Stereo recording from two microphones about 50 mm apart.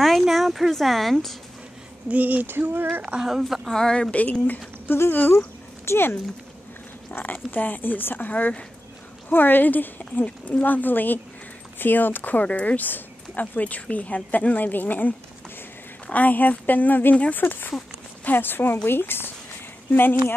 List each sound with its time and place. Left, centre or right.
0.2 s speech: centre
2.0 s a sound: right
3.0 s speech: right
3.3 s speech: centre
3.6 s speech: centre
4.1 s speech: left
4.8 s speech: left
7.2 s speech: left